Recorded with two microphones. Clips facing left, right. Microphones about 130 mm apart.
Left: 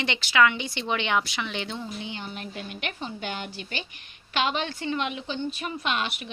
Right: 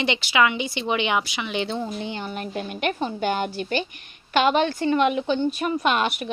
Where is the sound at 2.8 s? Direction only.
50° right (ahead or behind).